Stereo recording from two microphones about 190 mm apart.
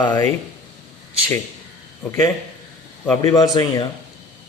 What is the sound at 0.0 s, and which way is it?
Speech, 10° left (ahead or behind).